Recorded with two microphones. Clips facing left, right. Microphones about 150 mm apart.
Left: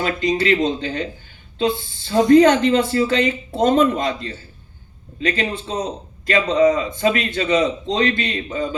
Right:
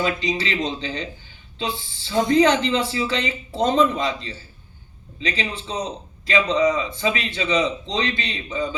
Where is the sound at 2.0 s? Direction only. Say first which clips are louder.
Left 5 dB; 50° left (ahead or behind).